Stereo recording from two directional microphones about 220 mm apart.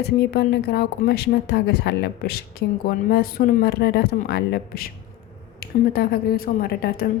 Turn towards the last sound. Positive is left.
turn(degrees=45)  # may be behind; listen again after turning